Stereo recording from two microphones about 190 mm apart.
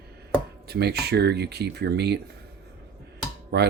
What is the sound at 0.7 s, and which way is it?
Speech, 60° right (ahead or behind).